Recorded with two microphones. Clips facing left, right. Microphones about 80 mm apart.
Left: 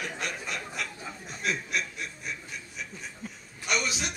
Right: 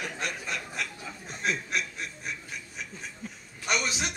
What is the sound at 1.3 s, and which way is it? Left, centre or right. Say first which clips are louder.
Chuckle: right 1 dB; right.